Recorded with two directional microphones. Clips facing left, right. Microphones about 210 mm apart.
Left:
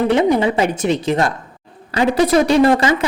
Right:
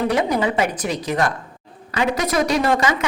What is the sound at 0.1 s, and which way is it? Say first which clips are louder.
A woman's voice: left 5 dB; 25° left (ahead or behind).